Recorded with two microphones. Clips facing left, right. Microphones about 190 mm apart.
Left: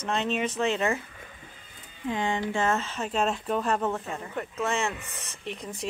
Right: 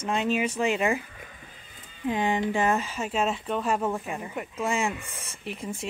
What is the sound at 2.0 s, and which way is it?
Speech, 20° right (ahead or behind).